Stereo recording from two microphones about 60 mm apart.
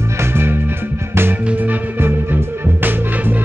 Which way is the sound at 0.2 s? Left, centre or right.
Right.